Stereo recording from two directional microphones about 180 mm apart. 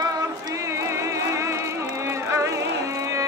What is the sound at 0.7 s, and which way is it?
Music, 15° right (ahead or behind).